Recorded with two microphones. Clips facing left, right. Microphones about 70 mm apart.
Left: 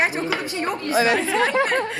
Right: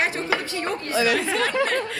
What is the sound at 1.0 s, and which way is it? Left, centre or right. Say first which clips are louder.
Speech: left 1 dB; left.